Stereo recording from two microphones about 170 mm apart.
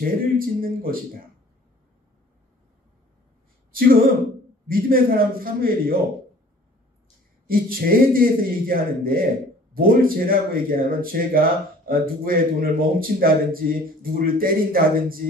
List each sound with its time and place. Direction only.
0.0 s speech: 55° right (ahead or behind)
3.7 s speech: 60° right (ahead or behind)
7.4 s speech: 60° right (ahead or behind)